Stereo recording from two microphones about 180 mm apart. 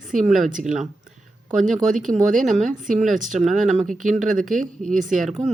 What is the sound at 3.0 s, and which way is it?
Speech, centre (ahead or behind).